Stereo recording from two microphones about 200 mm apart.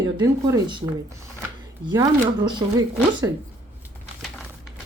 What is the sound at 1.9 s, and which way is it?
Speech, 20° right (ahead or behind).